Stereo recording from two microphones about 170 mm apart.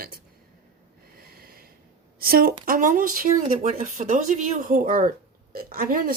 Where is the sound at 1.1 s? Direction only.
60° right (ahead or behind).